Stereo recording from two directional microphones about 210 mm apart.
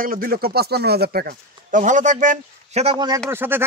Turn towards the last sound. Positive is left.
turn(degrees=-10)  # may be behind; listen again after turning